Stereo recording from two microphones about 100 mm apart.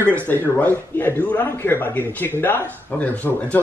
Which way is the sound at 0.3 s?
20° left (ahead or behind).